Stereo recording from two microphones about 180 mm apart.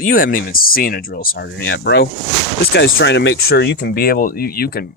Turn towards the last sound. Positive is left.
turn(degrees=55)  # may be behind; listen again after turning